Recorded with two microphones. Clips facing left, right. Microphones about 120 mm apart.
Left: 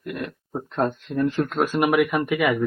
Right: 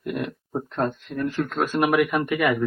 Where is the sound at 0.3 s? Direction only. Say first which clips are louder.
Right 2 dB; 5° right (ahead or behind).